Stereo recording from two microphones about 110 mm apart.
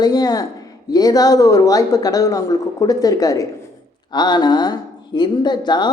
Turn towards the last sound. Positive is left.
turn(degrees=40)  # may be behind; listen again after turning